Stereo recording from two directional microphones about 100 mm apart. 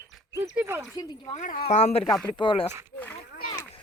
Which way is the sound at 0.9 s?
40° left (ahead or behind).